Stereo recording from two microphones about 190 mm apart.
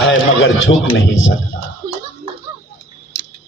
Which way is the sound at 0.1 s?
90° left.